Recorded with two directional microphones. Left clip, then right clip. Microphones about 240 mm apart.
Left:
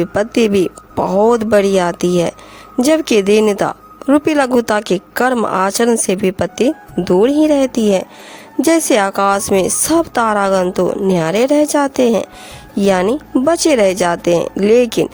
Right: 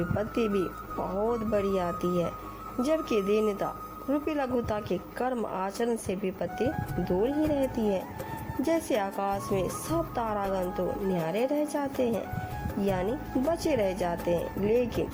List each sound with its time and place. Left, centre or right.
0.0 s speech: left